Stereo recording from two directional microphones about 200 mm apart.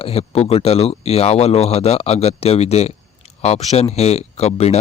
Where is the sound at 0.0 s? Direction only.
30° left (ahead or behind).